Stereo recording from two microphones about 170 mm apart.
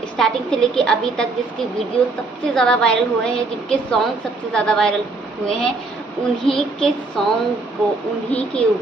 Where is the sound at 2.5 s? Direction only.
5° left (ahead or behind).